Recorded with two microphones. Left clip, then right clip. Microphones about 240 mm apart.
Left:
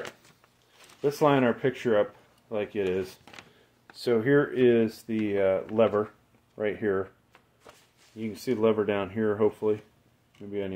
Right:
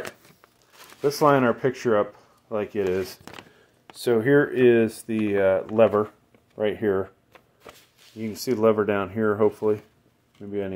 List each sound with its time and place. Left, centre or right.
1.0 s speech: right
8.2 s speech: right